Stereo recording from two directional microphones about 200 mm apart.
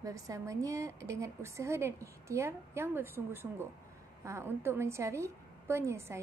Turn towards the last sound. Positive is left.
turn(degrees=-15)  # may be behind; listen again after turning